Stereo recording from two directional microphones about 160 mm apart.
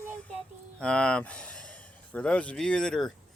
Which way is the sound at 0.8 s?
5° left (ahead or behind).